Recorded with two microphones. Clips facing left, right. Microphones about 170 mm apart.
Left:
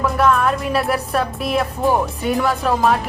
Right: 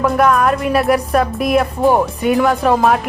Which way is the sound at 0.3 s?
5° right (ahead or behind).